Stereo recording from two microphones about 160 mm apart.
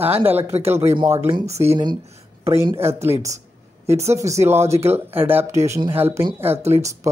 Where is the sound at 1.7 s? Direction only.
30° right (ahead or behind).